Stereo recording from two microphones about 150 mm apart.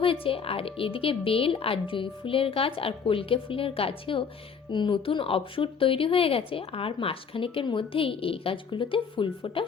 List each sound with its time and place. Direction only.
0.0 s speech: 35° left (ahead or behind)